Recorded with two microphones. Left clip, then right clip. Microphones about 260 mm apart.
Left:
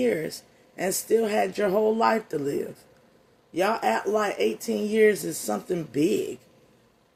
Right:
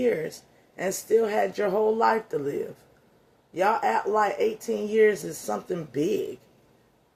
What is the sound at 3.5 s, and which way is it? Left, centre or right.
Speech, left.